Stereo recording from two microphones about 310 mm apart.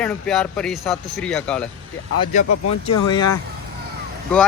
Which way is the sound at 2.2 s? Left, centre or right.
Left.